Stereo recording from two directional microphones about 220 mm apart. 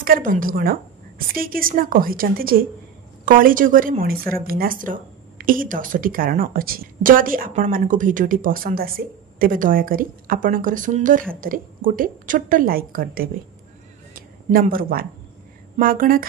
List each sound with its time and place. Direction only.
0.0 s speech: 40° right (ahead or behind)
14.1 s a sound: 40° right (ahead or behind)
15.8 s speech: 40° right (ahead or behind)